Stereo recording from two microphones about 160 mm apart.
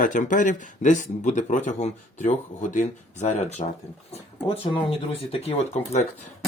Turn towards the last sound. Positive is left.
turn(degrees=40)  # may be behind; listen again after turning